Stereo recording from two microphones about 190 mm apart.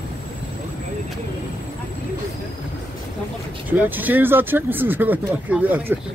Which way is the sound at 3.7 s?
10° right (ahead or behind).